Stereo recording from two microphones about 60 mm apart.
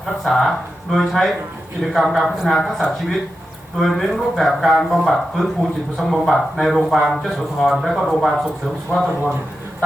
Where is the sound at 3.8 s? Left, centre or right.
Centre.